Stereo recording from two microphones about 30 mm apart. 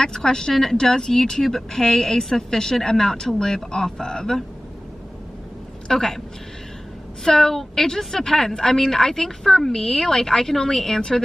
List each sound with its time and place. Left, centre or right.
0.0 s a woman's voice: left
5.9 s a woman's voice: centre
7.2 s a woman's voice: centre